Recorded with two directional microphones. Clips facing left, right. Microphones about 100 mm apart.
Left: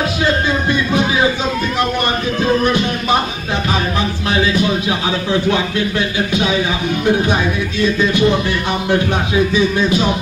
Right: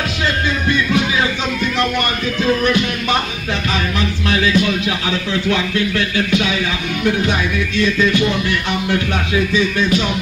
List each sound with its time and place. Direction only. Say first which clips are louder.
0.7 s music: left 1 dB; 20° left (ahead or behind)
2.4 s music: left 1 dB; 25° left (ahead or behind)